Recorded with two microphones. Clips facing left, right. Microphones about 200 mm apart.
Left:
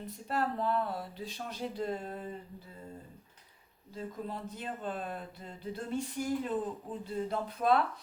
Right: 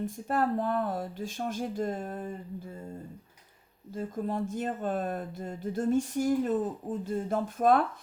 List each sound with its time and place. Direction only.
0.0 s speech: 50° right (ahead or behind)
3.9 s speech: 45° right (ahead or behind)